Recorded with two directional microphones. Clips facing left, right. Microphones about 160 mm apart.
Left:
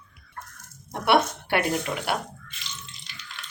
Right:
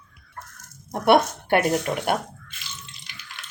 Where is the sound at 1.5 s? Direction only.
50° right (ahead or behind).